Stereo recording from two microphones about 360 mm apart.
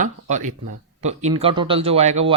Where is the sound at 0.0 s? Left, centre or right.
Centre.